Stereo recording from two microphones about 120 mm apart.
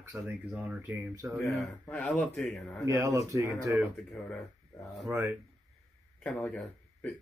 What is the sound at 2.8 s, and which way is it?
Speech, 25° right (ahead or behind).